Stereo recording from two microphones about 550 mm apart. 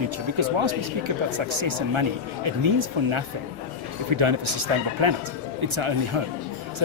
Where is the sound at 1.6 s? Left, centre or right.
Right.